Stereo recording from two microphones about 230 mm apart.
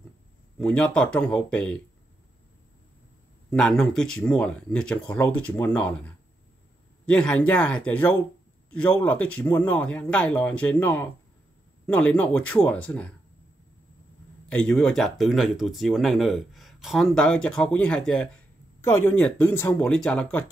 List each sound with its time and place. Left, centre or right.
0.6 s speech: centre
3.4 s speech: centre
14.5 s speech: centre